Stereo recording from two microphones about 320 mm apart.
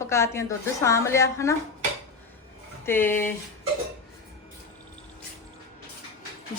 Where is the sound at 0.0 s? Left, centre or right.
Centre.